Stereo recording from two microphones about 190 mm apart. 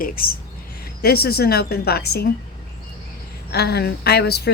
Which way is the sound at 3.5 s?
60° left (ahead or behind).